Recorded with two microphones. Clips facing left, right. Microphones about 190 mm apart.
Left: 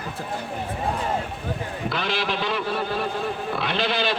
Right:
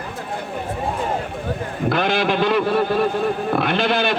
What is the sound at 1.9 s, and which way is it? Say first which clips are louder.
A man's voice: right 8 dB; 50° right (ahead or behind).